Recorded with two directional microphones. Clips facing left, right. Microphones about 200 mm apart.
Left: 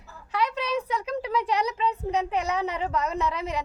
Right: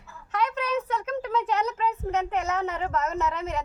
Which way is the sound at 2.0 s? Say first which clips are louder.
Even; centre (ahead or behind).